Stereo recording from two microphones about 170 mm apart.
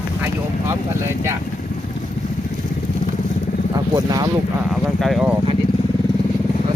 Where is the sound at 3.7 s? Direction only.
20° right (ahead or behind).